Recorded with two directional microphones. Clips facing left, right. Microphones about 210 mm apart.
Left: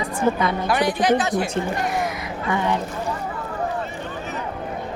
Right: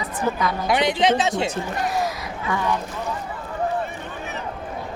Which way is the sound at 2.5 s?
20° left (ahead or behind).